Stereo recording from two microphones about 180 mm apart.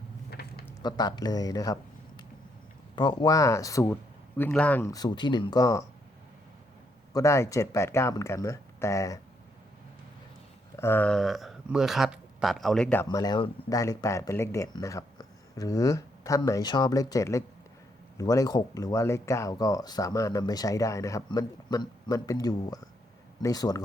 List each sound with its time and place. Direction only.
0.3 s a sound: 60° left (ahead or behind)
0.8 s speech: 25° left (ahead or behind)
4.9 s speech: 20° left (ahead or behind)
7.1 s speech: 15° left (ahead or behind)
10.8 s speech: 10° left (ahead or behind)
13.1 s speech: 25° left (ahead or behind)